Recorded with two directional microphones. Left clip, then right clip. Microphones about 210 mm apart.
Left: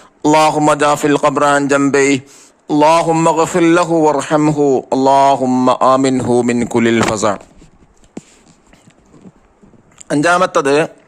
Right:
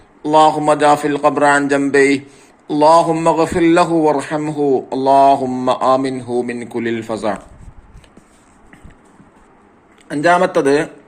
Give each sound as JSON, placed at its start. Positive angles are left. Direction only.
{"t": 0.2, "sound": "a man's voice", "side_deg": 50}
{"t": 10.1, "sound": "a man's voice", "side_deg": 45}